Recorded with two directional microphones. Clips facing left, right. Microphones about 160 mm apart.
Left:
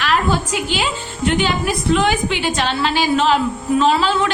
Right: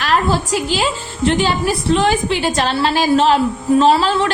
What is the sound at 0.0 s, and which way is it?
A woman's voice, 35° right (ahead or behind).